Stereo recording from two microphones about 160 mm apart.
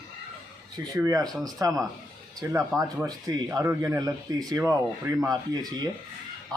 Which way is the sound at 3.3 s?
20° right (ahead or behind).